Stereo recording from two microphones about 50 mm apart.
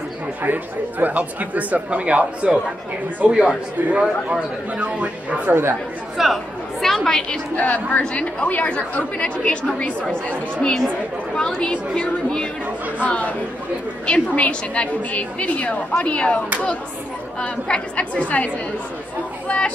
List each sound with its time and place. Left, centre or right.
0.4 s speech: right
3.3 s a man's voice: centre
5.5 s speech: right
6.1 s a woman's voice: centre
7.5 s a woman's voice: left
11.3 s speech: centre
13.0 s a woman's voice: left
17.4 s a woman's voice: centre